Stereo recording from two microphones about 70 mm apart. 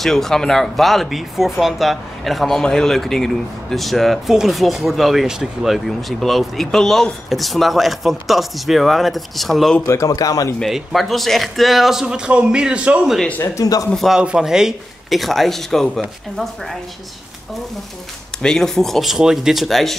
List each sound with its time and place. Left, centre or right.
0.0 s speech: centre
9.8 s a man's voice: left
10.6 s speech: centre
13.6 s a man's voice: left
13.9 s speech: centre
18.4 s speech: centre